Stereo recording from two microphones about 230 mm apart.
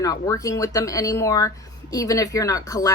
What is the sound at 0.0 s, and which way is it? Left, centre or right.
A woman's voice, centre.